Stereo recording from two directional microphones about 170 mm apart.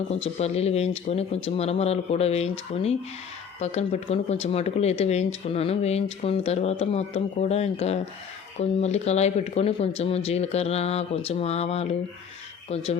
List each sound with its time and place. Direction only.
0.1 s speech: 40° left (ahead or behind)